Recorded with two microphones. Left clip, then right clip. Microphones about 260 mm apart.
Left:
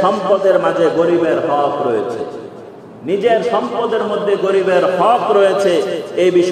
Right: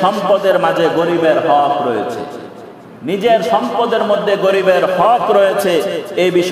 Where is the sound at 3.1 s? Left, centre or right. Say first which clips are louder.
Right 1 dB; right.